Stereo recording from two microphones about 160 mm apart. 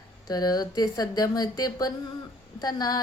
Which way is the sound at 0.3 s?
25° left (ahead or behind).